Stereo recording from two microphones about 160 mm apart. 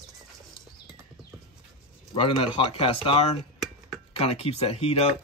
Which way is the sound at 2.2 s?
35° left (ahead or behind).